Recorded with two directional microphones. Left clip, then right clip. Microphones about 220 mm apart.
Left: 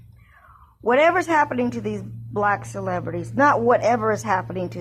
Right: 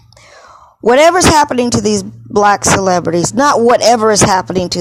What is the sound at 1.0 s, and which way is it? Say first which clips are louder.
Speech: right 10 dB; 40° right (ahead or behind).